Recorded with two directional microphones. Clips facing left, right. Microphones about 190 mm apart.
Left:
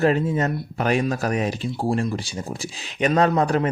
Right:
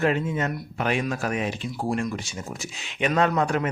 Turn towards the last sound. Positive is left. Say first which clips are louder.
# left 3 dB
turn(degrees=35)  # may be behind; listen again after turning